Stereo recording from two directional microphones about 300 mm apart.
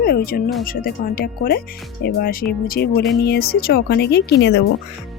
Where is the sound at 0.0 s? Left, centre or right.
Left.